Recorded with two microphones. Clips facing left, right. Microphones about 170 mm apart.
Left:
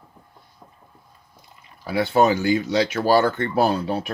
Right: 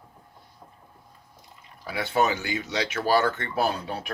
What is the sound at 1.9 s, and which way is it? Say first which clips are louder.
Speech: left 6 dB; 35° left (ahead or behind).